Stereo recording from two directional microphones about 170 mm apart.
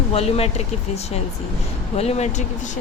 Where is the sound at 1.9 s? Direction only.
40° left (ahead or behind).